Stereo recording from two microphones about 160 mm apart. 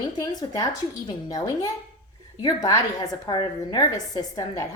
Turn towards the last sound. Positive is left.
turn(degrees=20)  # may be behind; listen again after turning